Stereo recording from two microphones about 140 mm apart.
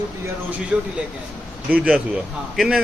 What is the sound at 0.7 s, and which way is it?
A man's voice, 10° right (ahead or behind).